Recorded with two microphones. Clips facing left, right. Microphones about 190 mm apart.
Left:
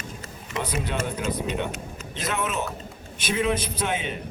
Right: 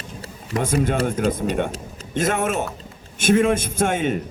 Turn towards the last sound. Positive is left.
turn(degrees=-50)  # may be behind; listen again after turning